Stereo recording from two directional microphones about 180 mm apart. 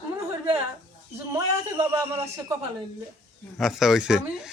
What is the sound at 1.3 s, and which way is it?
Speech, 15° right (ahead or behind).